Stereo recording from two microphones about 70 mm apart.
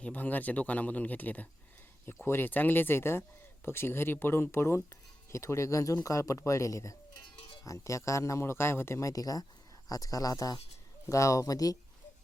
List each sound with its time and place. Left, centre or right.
0.0 s speech: left